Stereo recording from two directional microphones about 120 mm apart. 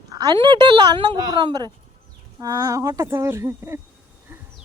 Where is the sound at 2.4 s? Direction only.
30° right (ahead or behind).